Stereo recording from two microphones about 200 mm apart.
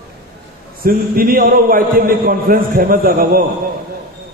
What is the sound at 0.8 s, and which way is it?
A man's voice, 45° right (ahead or behind).